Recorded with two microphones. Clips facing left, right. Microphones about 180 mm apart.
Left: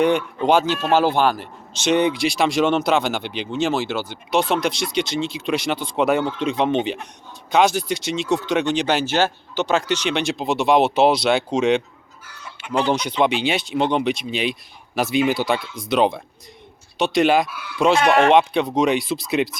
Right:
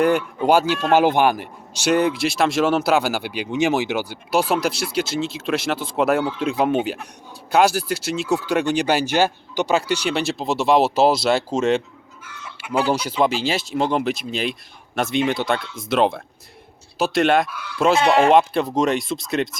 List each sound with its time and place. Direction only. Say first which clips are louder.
0.3 s speech: right 1 dB; 10° right (ahead or behind)
12.2 s chicken: right 3 dB; 35° left (ahead or behind)
12.6 s speech: even; 10° right (ahead or behind)